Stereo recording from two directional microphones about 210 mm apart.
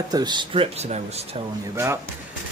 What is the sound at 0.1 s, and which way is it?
Speech, 20° right (ahead or behind).